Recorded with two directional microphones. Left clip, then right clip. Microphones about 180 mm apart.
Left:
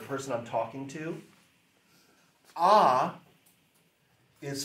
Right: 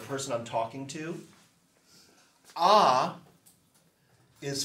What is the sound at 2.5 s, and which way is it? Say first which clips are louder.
Speech: even; 20° left (ahead or behind).